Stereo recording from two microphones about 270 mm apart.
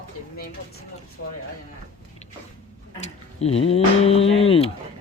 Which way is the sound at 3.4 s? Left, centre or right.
Left.